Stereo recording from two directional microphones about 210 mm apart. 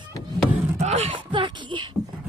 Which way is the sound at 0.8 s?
30° right (ahead or behind).